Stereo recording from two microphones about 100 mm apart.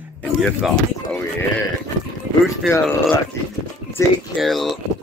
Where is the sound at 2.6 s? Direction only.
Centre (ahead or behind).